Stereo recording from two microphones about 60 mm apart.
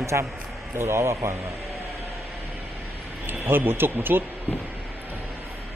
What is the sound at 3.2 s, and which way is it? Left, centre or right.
Speech, right.